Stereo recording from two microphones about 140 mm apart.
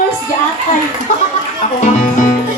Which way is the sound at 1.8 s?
70° left (ahead or behind).